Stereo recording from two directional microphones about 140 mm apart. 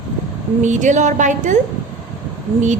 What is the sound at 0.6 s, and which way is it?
Speech, 60° right (ahead or behind).